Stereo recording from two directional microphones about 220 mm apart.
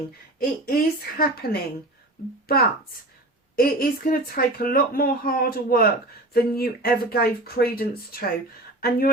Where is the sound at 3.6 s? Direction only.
40° left (ahead or behind).